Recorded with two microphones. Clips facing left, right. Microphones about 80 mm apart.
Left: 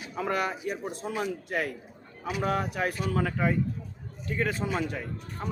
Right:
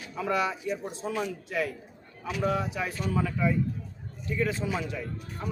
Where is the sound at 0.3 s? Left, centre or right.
Left.